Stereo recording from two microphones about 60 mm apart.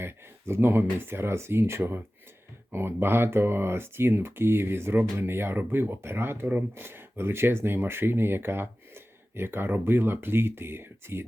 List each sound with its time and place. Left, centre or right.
0.0 s speech: right